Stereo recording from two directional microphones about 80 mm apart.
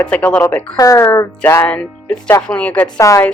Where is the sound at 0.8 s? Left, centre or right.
Left.